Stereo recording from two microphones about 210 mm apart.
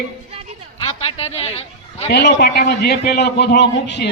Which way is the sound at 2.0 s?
50° left (ahead or behind).